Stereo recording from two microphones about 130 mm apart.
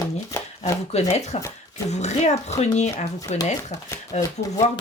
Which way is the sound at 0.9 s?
55° left (ahead or behind).